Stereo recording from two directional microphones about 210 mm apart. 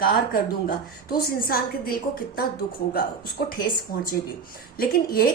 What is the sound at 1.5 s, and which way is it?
A woman's voice, 45° left (ahead or behind).